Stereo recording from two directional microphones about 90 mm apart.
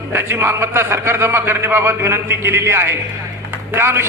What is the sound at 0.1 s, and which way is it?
A man's voice, 25° right (ahead or behind).